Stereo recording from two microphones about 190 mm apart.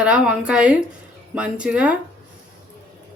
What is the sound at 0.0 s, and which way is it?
Speech, 5° right (ahead or behind).